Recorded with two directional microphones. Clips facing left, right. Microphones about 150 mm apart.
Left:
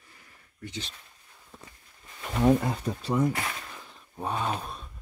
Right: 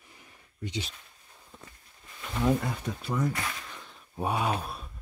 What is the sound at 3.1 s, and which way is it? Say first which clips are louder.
Speech: left 4 dB; 25° left (ahead or behind).